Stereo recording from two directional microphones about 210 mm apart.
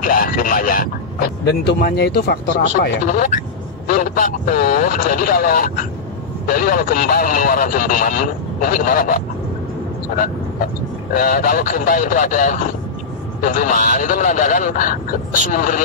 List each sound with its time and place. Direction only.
0.0 s speech: 40° left (ahead or behind)
3.1 s a man's voice: 35° left (ahead or behind)